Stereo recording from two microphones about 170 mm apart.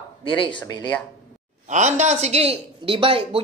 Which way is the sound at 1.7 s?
45° right (ahead or behind).